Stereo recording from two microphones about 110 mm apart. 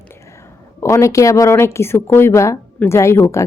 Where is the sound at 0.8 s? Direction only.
30° left (ahead or behind).